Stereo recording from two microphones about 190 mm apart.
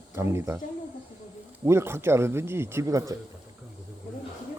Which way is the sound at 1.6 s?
15° right (ahead or behind).